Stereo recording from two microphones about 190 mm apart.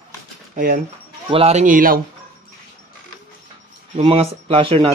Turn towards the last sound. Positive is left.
turn(degrees=-30)  # may be behind; listen again after turning